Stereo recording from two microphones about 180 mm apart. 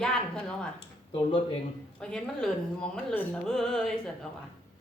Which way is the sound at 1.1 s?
25° left (ahead or behind).